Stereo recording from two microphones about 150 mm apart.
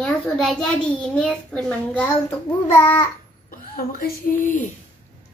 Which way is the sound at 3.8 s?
75° left (ahead or behind).